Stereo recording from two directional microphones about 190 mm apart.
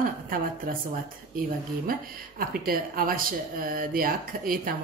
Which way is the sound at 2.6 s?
50° right (ahead or behind).